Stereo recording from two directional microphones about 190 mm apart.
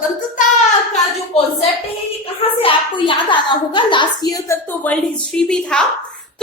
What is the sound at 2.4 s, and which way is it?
A woman's voice, 25° left (ahead or behind).